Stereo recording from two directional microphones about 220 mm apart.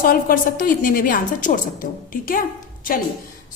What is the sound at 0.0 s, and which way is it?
A woman's voice, 40° left (ahead or behind).